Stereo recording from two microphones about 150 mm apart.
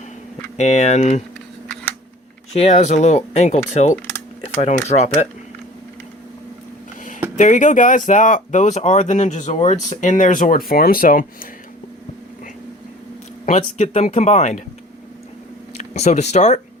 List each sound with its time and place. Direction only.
0.5 s speech: 50° left (ahead or behind)
2.5 s speech: 45° left (ahead or behind)
7.3 s speech: 55° left (ahead or behind)
10.7 s speech: 75° left (ahead or behind)
13.4 s speech: 50° left (ahead or behind)
15.8 s speech: 45° left (ahead or behind)